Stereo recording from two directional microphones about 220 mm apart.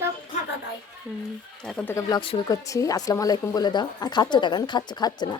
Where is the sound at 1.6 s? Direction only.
5° left (ahead or behind).